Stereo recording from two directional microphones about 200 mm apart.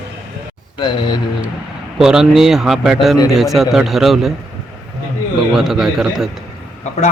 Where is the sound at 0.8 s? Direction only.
25° left (ahead or behind).